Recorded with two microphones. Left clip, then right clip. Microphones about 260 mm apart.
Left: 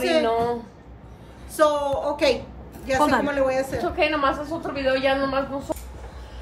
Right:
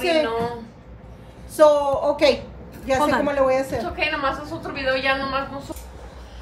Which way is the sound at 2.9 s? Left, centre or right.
Centre.